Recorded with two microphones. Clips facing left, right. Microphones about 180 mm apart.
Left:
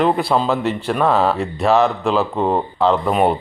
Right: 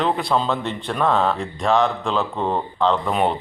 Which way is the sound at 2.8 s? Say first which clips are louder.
Left 2 dB; 10° left (ahead or behind).